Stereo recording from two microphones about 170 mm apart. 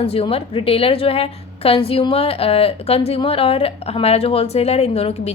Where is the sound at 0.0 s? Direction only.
35° left (ahead or behind).